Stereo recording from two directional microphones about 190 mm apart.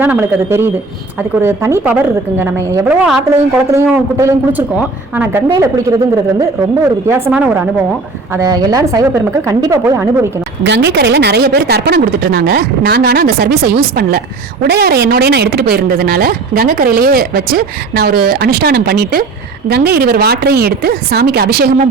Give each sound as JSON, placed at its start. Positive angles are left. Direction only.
{"t": 0.0, "sound": "a woman's voice", "side_deg": -10}
{"t": 8.3, "sound": "a woman's voice", "side_deg": -20}
{"t": 10.6, "sound": "a woman's voice", "side_deg": -65}